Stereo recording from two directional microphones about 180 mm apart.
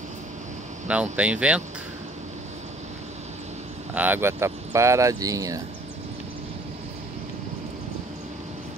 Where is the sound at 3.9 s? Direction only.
10° right (ahead or behind).